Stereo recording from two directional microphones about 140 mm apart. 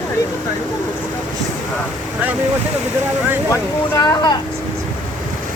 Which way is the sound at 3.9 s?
25° left (ahead or behind).